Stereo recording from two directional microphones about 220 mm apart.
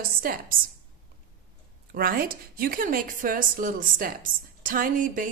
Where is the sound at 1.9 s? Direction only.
40° right (ahead or behind).